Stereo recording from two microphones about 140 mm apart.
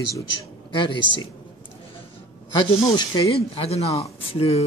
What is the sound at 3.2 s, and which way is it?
Speech, 45° left (ahead or behind).